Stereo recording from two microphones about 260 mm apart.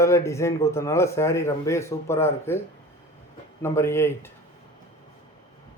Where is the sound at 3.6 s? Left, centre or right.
Centre.